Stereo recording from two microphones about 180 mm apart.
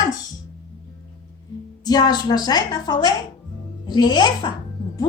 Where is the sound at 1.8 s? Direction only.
20° left (ahead or behind).